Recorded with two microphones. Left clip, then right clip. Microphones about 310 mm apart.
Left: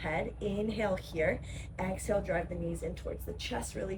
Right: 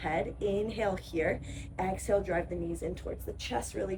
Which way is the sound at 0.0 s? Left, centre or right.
Centre.